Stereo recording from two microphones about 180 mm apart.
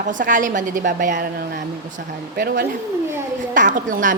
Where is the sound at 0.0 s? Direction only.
45° right (ahead or behind).